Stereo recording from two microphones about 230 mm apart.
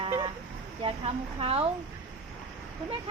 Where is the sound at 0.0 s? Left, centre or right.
Right.